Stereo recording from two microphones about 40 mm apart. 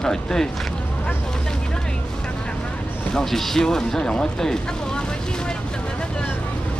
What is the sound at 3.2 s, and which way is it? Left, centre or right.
Speech, centre.